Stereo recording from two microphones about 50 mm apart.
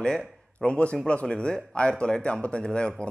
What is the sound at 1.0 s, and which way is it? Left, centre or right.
Speech, centre.